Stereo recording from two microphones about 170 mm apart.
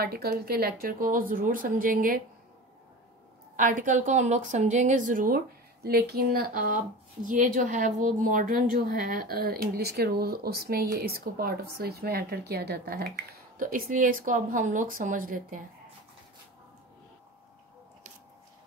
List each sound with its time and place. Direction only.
0.0 s speech: 65° right (ahead or behind)
3.5 s a woman's voice: 50° right (ahead or behind)